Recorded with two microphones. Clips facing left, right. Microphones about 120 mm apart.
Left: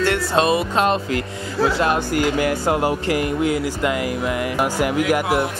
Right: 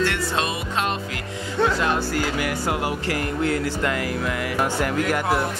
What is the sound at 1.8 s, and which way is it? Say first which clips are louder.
Music: left 4 dB; 15° left (ahead or behind).